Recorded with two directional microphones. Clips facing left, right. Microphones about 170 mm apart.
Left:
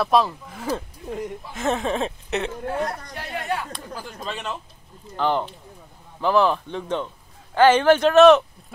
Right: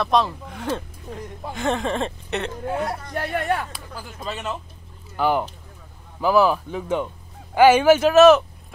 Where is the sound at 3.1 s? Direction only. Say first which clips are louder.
Right 6 dB; 50° right (ahead or behind).